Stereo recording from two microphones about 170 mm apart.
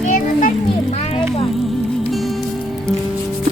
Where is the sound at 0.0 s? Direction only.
50° left (ahead or behind).